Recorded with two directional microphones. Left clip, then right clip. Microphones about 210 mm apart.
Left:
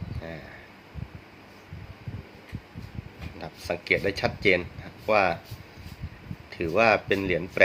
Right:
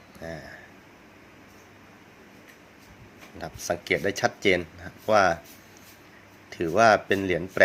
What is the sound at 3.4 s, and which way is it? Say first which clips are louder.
Speech: right 2 dB; 25° right (ahead or behind).